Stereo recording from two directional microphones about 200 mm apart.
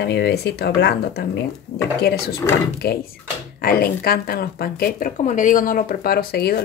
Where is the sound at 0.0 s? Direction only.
55° left (ahead or behind).